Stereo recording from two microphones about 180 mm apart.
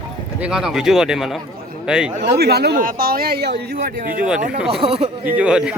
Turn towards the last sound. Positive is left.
turn(degrees=-5)  # may be behind; listen again after turning